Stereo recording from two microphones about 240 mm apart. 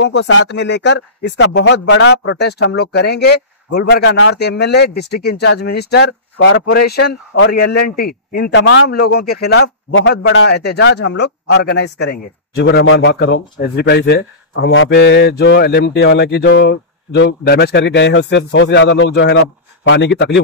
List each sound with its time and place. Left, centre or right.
0.0 s speech: left